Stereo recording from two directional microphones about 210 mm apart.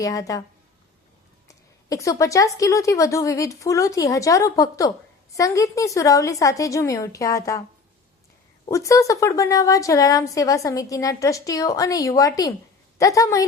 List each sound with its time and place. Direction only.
0.0 s a woman's voice: 15° left (ahead or behind)
1.5 s a sound: 15° left (ahead or behind)
2.6 s a woman's voice: 15° left (ahead or behind)
8.6 s a woman's voice: 15° left (ahead or behind)